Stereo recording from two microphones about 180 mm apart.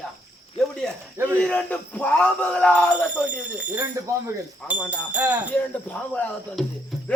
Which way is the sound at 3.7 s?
15° right (ahead or behind).